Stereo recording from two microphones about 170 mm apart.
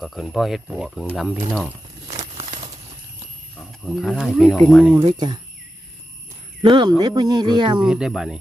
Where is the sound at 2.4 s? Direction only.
40° right (ahead or behind).